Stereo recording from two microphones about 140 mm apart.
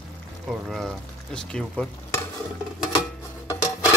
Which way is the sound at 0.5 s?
Centre (ahead or behind).